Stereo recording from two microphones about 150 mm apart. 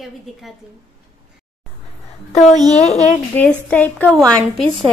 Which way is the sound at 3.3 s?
10° left (ahead or behind).